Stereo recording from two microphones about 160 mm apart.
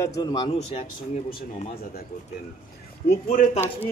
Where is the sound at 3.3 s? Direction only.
55° left (ahead or behind).